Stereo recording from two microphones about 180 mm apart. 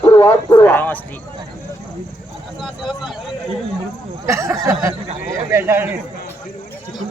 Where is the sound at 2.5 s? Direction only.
Centre (ahead or behind).